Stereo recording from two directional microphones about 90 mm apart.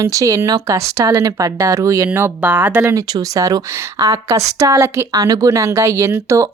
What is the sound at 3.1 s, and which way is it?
Speech, 40° right (ahead or behind).